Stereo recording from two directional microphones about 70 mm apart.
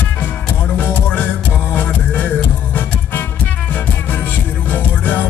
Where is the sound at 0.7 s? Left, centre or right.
Left.